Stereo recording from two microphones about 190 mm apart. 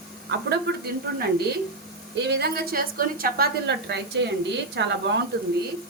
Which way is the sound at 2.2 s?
55° right (ahead or behind).